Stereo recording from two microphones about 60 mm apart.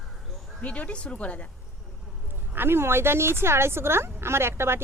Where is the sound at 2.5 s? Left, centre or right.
Right.